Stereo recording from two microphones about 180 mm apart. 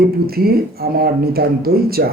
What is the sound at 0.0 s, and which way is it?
Speech, 60° right (ahead or behind).